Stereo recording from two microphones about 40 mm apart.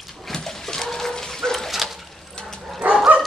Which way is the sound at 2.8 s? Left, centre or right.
Right.